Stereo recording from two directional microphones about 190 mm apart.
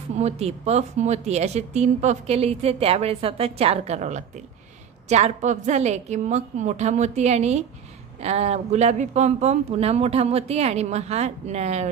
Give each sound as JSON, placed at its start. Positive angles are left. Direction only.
{"t": 0.2, "sound": "speech", "side_deg": -35}